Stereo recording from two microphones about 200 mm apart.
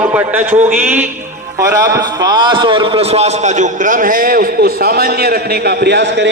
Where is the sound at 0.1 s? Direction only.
10° right (ahead or behind).